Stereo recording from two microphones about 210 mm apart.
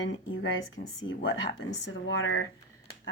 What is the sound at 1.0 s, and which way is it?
Speech, 65° left (ahead or behind).